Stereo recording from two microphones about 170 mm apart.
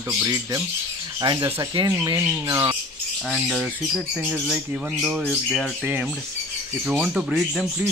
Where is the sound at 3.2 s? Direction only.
Centre (ahead or behind).